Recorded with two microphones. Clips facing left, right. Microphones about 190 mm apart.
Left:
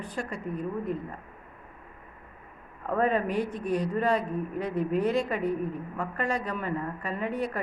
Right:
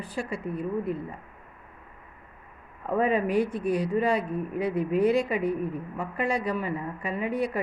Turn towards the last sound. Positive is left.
turn(degrees=-10)  # may be behind; listen again after turning